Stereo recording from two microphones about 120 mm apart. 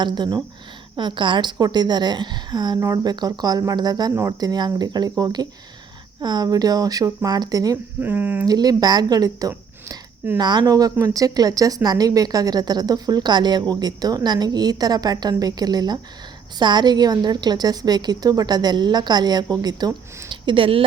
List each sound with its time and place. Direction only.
0.0 s speech: 40° right (ahead or behind)
8.0 s speech: 15° right (ahead or behind)
8.4 s speech: 35° right (ahead or behind); by 20.8 s 50° right (ahead or behind)